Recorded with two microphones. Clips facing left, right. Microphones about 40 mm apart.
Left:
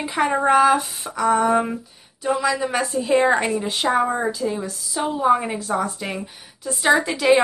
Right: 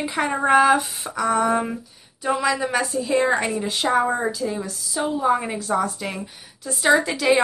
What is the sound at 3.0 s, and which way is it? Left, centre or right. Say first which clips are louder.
Speech: left 4 dB; centre.